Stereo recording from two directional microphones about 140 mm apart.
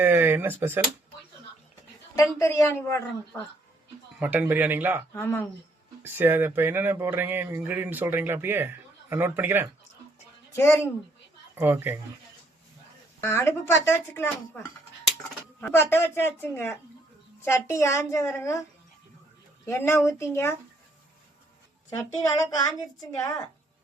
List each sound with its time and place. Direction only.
0.0 s a sound: 15° right (ahead or behind)
2.4 s a woman's voice: 20° left (ahead or behind)
4.2 s speech: 10° right (ahead or behind)
5.1 s a woman's voice: 15° left (ahead or behind)
6.0 s speech: 15° right (ahead or behind)
10.5 s speech: 20° left (ahead or behind)
11.5 s speech: 15° right (ahead or behind)
13.2 s a woman's voice: 20° left (ahead or behind)
15.6 s a woman's voice: 15° left (ahead or behind)
19.6 s a woman's voice: 20° left (ahead or behind)
21.8 s a woman's voice: 25° left (ahead or behind)